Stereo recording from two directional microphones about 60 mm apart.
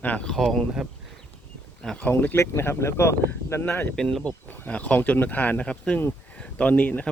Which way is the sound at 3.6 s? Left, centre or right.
Left.